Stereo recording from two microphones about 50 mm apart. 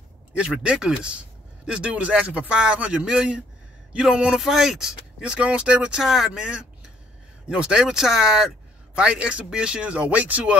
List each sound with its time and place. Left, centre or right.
0.5 s speech: centre
5.9 s speech: centre; by 10.6 s right